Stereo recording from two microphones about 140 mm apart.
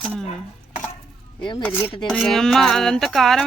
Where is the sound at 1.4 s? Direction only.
35° left (ahead or behind).